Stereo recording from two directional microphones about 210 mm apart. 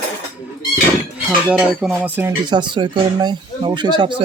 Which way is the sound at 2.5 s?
20° right (ahead or behind).